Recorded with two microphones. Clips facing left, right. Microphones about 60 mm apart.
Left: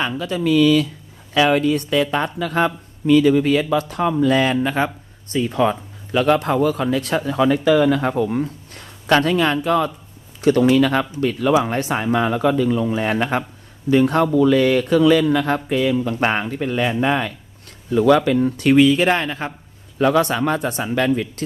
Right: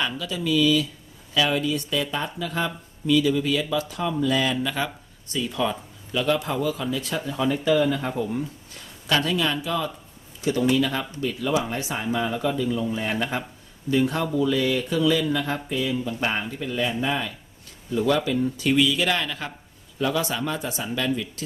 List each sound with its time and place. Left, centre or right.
0.2 s speech: left
4.5 s speech: left
20.0 s speech: left